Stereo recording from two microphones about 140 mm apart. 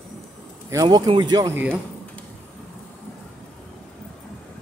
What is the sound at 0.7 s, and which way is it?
Speech, 30° right (ahead or behind).